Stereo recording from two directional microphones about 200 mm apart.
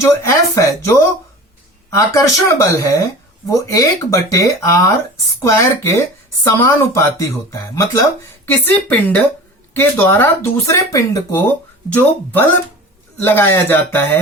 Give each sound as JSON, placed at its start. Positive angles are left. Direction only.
{"t": 0.0, "sound": "speech", "side_deg": 15}
{"t": 2.0, "sound": "speech", "side_deg": 15}